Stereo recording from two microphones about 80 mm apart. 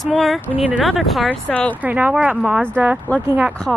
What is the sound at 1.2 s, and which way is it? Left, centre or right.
Speech, centre.